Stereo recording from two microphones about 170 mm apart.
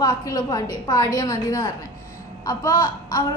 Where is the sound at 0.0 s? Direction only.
20° left (ahead or behind).